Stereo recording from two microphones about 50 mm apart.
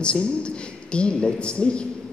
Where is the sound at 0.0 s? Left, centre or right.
Left.